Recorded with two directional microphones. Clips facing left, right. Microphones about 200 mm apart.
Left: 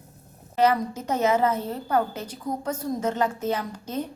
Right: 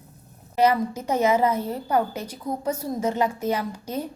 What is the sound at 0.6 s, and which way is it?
A woman's voice, 10° right (ahead or behind).